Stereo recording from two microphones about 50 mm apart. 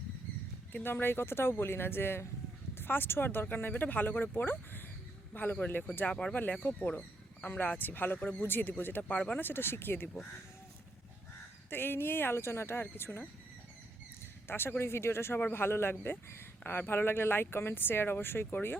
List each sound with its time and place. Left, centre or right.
0.7 s speech: left
6.1 s speech: centre
6.3 s speech: left
9.0 s speech: left
9.4 s speech: left
11.7 s speech: left
14.4 s speech: left